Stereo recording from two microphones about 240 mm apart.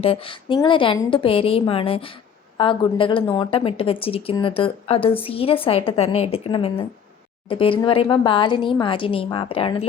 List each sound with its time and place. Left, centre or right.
0.0 s a woman's voice: left